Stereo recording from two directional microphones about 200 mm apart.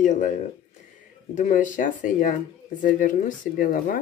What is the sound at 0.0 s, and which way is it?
Speech, 40° left (ahead or behind).